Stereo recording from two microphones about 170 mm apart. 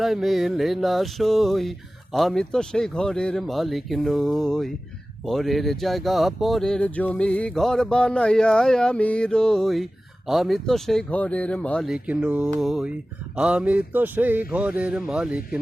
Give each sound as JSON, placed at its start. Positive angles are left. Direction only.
{"t": 0.0, "sound": "speech", "side_deg": 0}